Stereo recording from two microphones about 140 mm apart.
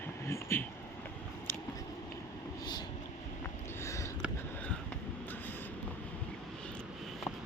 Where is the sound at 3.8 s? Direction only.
20° left (ahead or behind).